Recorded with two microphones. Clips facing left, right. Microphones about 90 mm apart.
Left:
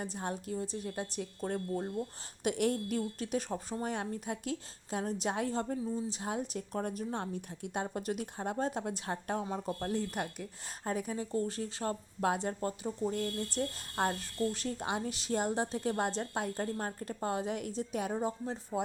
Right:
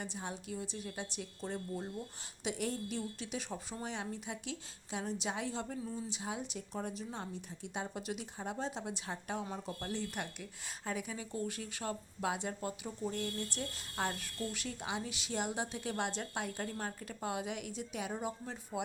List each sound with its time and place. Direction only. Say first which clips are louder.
0.0 s speech: left 5 dB; 45° left (ahead or behind)
12.2 s speech: left 5 dB; 45° left (ahead or behind)